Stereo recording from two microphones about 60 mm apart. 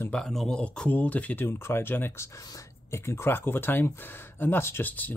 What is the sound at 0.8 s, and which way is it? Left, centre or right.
Speech, left.